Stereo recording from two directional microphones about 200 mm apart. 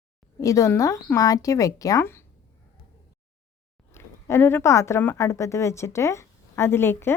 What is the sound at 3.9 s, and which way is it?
Speech, 10° left (ahead or behind).